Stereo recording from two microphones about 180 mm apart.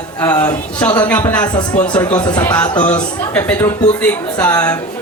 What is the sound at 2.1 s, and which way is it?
Speech, 25° left (ahead or behind).